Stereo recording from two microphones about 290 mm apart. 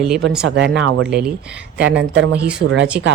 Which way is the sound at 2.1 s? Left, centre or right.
Right.